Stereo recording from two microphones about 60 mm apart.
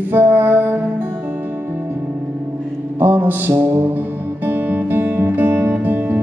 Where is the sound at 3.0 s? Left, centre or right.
Right.